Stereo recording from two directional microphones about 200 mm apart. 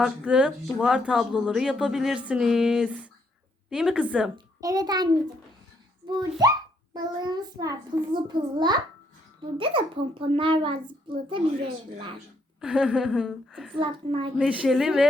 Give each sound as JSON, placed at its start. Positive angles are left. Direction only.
{"t": 0.0, "sound": "speech", "side_deg": -5}
{"t": 4.6, "sound": "a child's voice", "side_deg": -20}
{"t": 12.5, "sound": "speech", "side_deg": -5}
{"t": 13.7, "sound": "a child's voice", "side_deg": -25}
{"t": 14.3, "sound": "speech", "side_deg": -5}